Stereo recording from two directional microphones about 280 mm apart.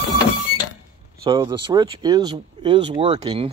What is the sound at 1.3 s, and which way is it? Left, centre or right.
A man's voice, centre.